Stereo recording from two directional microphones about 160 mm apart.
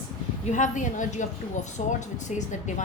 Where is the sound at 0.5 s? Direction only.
50° left (ahead or behind).